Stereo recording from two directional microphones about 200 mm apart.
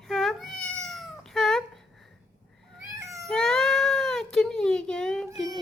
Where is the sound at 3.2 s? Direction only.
Centre (ahead or behind).